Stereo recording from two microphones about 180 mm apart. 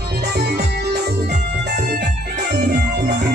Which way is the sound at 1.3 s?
65° right (ahead or behind).